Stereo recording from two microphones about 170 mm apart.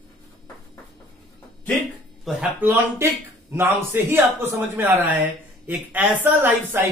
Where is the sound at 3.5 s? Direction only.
15° right (ahead or behind).